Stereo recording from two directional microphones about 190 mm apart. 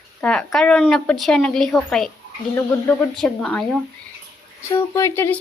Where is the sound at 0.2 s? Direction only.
5° left (ahead or behind).